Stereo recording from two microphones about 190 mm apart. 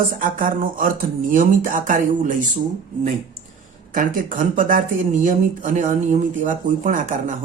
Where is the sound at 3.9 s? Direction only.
45° right (ahead or behind).